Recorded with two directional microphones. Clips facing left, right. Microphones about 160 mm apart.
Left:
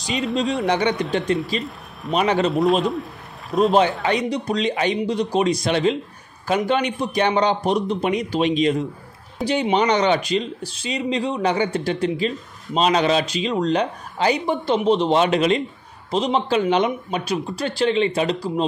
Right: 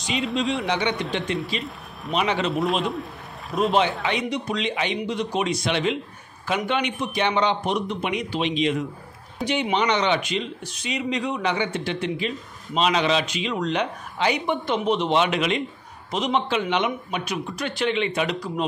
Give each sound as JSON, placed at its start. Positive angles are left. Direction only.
{"t": 0.1, "sound": "a man's voice", "side_deg": 0}
{"t": 0.7, "sound": "speech", "side_deg": 45}
{"t": 2.5, "sound": "a man's voice", "side_deg": 0}
{"t": 4.0, "sound": "speech", "side_deg": 40}